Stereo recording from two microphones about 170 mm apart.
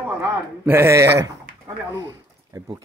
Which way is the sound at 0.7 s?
15° right (ahead or behind).